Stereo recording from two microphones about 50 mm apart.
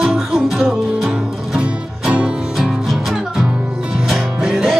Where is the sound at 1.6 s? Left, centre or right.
Right.